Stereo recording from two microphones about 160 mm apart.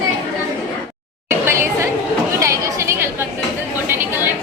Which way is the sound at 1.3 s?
15° right (ahead or behind).